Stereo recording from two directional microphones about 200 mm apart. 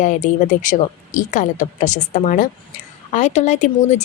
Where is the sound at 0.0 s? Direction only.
40° left (ahead or behind).